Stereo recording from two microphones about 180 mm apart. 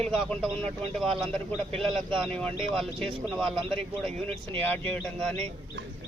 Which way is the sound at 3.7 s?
30° right (ahead or behind).